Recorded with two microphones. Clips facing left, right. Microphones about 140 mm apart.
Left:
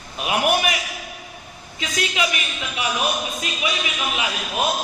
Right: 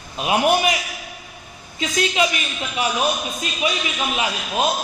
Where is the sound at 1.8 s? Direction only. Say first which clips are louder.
Right 4 dB; 35° right (ahead or behind).